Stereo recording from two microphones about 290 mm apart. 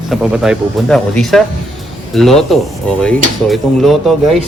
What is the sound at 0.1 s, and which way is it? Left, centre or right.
Speech, centre.